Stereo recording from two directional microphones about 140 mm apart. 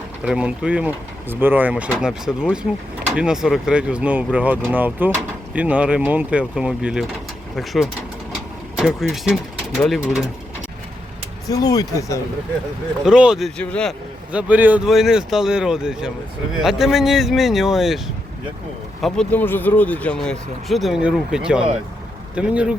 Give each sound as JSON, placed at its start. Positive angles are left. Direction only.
{"t": 0.3, "sound": "speech", "side_deg": -5}
{"t": 11.4, "sound": "speech", "side_deg": 25}
{"t": 13.1, "sound": "speech", "side_deg": -5}
{"t": 13.6, "sound": "a man's voice", "side_deg": 5}
{"t": 14.3, "sound": "speech", "side_deg": -10}
{"t": 19.0, "sound": "speech", "side_deg": 5}